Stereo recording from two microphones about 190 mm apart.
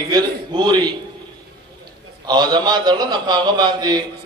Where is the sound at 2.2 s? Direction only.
25° right (ahead or behind).